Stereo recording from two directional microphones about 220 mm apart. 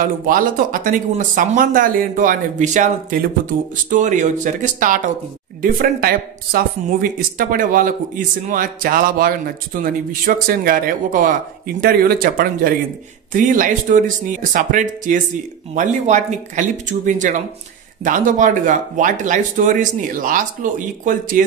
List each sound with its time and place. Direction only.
0.3 s speech: 35° right (ahead or behind)